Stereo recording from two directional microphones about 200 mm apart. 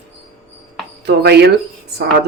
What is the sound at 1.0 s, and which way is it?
Speech, 55° right (ahead or behind).